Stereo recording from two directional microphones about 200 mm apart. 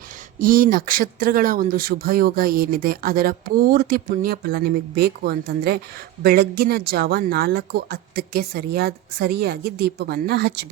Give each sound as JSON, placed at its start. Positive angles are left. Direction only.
{"t": 0.3, "sound": "speech", "side_deg": -45}